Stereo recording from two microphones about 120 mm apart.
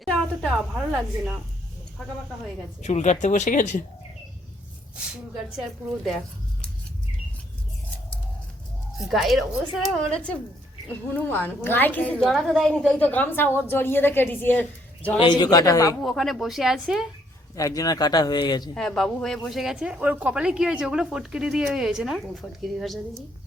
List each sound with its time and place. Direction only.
0.0 s a sound: 5° left (ahead or behind)
0.9 s a woman's voice: 5° right (ahead or behind)
2.8 s speech: 75° left (ahead or behind)
9.0 s a woman's voice: centre (ahead or behind)
12.2 s a woman's voice: centre (ahead or behind)
13.0 s a woman's voice: 15° left (ahead or behind)
15.2 s speech: 40° left (ahead or behind)
16.0 s a woman's voice: centre (ahead or behind)
17.5 s speech: 30° left (ahead or behind)
18.7 s a woman's voice: 5° left (ahead or behind)